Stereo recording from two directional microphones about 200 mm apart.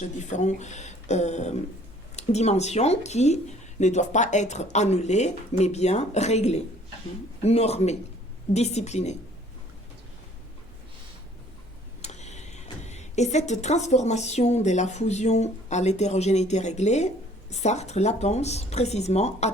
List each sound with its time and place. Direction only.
0.2 s speech: 35° left (ahead or behind)
12.0 s a woman's voice: 35° left (ahead or behind)